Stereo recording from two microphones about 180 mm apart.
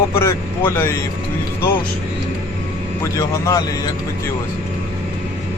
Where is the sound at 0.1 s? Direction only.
15° left (ahead or behind).